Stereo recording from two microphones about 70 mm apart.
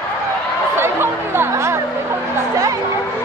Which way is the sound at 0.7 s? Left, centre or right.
Right.